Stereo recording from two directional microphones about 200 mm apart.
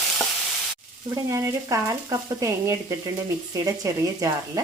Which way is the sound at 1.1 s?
15° right (ahead or behind).